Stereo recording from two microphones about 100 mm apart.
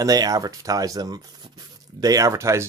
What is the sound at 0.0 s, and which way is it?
Speech, 40° right (ahead or behind).